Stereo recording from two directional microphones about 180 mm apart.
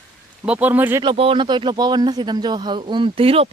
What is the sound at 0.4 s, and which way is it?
Speech, 10° right (ahead or behind).